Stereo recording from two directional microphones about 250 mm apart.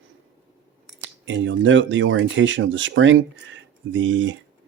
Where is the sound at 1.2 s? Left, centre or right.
Right.